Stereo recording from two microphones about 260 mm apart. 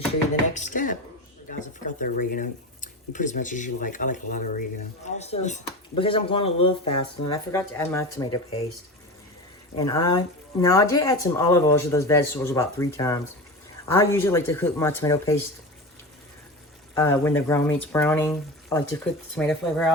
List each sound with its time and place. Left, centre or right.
0.5 s a sound: left
1.5 s speech: left
7.3 s speech: centre
9.7 s speech: centre
16.9 s speech: centre